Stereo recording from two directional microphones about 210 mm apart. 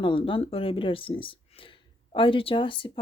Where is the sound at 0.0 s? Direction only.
25° left (ahead or behind).